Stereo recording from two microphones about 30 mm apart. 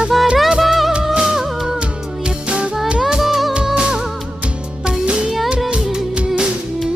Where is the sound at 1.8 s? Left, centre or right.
Right.